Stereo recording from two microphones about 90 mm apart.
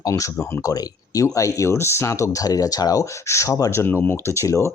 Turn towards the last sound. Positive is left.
turn(degrees=30)  # may be behind; listen again after turning